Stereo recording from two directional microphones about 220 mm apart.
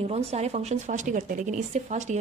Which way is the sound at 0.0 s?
30° right (ahead or behind).